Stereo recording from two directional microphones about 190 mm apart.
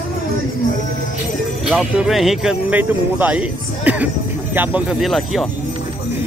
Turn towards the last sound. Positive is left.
turn(degrees=0)  # may be behind; listen again after turning